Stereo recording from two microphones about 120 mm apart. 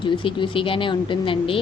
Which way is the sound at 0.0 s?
45° left (ahead or behind).